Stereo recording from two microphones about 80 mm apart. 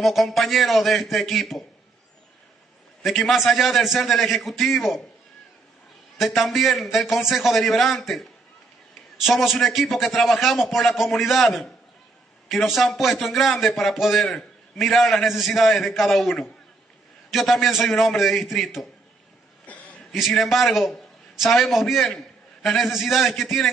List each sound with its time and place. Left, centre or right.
0.0 s a man's voice: centre
3.0 s a man's voice: centre
6.1 s a man's voice: centre
19.6 s a sound: centre
20.1 s a man's voice: centre